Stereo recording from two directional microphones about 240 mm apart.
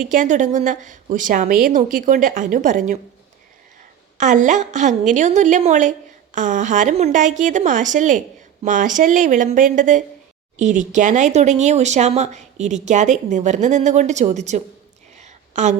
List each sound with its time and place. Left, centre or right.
0.0 s a woman's voice: right
4.2 s a woman's voice: right
15.2 s a sound: right